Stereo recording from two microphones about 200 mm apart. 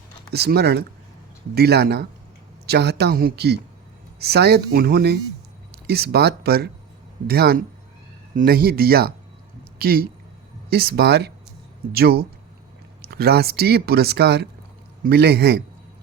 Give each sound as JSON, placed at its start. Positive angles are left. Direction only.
{"t": 0.3, "sound": "speech", "side_deg": -55}